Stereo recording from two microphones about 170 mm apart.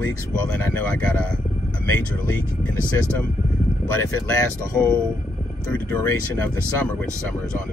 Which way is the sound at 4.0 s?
15° left (ahead or behind).